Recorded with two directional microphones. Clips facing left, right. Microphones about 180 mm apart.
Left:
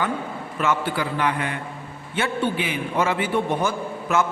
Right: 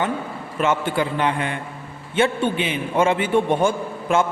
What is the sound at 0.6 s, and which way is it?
A man's voice, 25° right (ahead or behind).